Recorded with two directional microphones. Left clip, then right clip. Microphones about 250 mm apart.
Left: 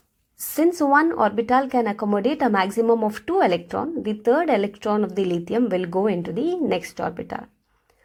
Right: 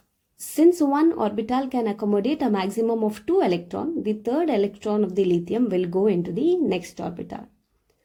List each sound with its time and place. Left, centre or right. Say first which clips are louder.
0.5 s speech: left 1 dB; centre